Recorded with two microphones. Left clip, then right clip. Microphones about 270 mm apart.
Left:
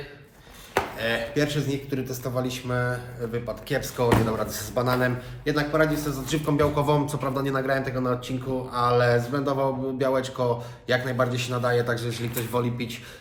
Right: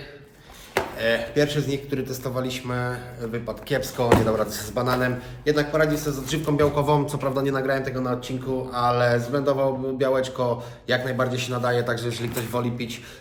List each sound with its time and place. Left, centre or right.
0.7 s speech: centre